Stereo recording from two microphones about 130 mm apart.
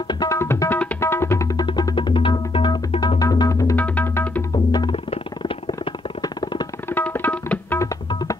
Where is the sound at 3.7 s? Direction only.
15° left (ahead or behind).